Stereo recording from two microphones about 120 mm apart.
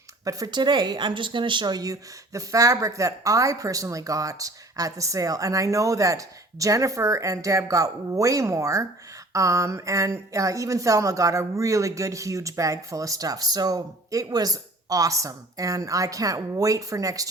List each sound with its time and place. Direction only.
0.3 s speech: 30° right (ahead or behind)